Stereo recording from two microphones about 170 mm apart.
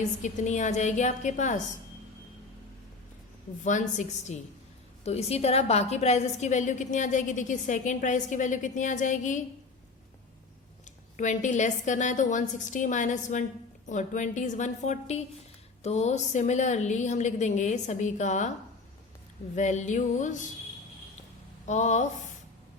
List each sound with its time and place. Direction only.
0.2 s a woman's voice: 45° left (ahead or behind)
3.6 s a woman's voice: 45° left (ahead or behind)
11.2 s a woman's voice: 45° left (ahead or behind)
19.5 s a woman's voice: 45° left (ahead or behind)
21.7 s a woman's voice: 45° left (ahead or behind)